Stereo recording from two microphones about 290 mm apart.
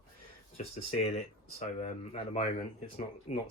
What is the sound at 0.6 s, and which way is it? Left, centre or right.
Speech, left.